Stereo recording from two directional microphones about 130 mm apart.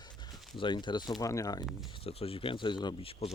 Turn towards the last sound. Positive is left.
turn(degrees=45)  # may be behind; listen again after turning